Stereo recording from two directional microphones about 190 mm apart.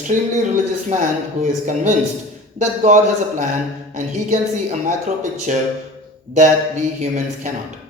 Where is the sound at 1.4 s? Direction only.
35° right (ahead or behind).